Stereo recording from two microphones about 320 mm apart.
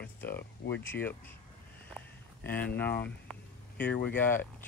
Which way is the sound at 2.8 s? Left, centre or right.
Centre.